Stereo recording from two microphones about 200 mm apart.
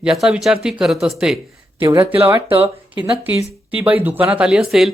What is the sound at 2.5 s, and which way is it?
Speech, 25° right (ahead or behind).